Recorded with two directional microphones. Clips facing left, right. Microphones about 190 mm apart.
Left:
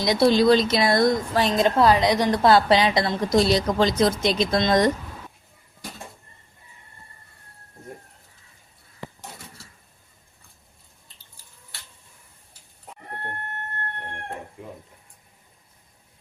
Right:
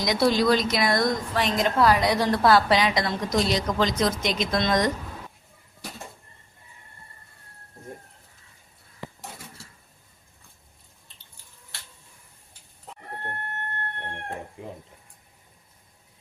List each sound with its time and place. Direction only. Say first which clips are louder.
0.0 s a woman's voice: left 4 dB; 30° left (ahead or behind)